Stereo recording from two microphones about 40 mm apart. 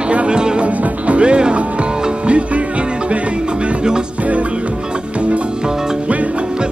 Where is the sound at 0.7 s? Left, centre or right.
Right.